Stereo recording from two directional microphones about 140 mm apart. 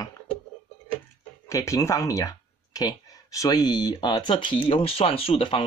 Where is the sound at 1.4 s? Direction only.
20° left (ahead or behind); by 5.6 s 40° left (ahead or behind).